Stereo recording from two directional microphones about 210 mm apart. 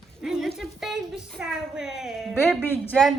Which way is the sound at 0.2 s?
Centre (ahead or behind).